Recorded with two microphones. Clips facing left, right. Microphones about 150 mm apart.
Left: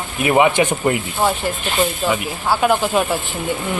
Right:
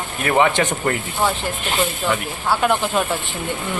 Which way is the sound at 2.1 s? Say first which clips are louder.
Left 2 dB; 5° left (ahead or behind).